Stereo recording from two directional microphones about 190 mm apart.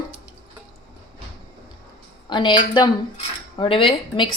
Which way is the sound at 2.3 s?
25° left (ahead or behind).